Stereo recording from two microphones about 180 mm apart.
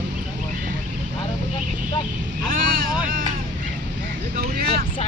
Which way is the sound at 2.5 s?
50° right (ahead or behind).